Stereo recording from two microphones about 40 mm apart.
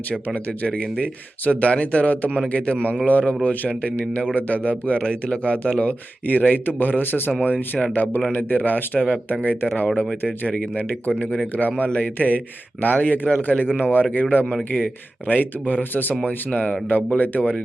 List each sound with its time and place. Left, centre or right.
0.6 s speech: left
3.7 s speech: left
5.8 s speech: left
7.4 s speech: left
14.0 s speech: left
16.2 s speech: left
16.9 s speech: left